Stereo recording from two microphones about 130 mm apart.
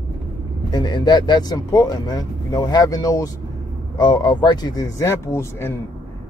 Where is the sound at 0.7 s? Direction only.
35° left (ahead or behind).